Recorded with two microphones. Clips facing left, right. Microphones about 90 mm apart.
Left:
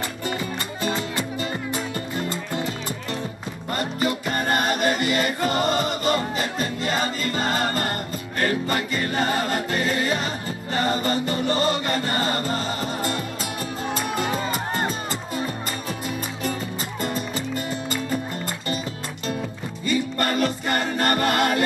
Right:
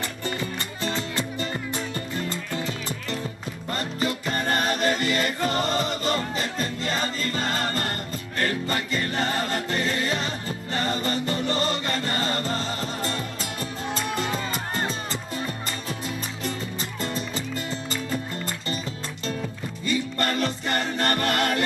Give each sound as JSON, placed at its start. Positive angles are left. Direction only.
{"t": 0.8, "sound": "music", "side_deg": 15}
{"t": 3.7, "sound": "music", "side_deg": 15}
{"t": 19.9, "sound": "music", "side_deg": 15}
{"t": 20.6, "sound": "choir", "side_deg": 15}